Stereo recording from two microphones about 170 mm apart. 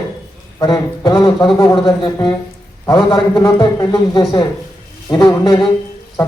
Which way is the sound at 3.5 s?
25° left (ahead or behind).